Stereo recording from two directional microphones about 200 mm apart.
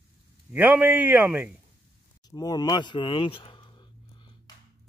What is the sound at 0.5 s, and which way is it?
A man's voice, 5° right (ahead or behind).